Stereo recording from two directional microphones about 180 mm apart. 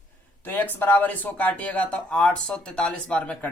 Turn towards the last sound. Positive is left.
turn(degrees=5)  # may be behind; listen again after turning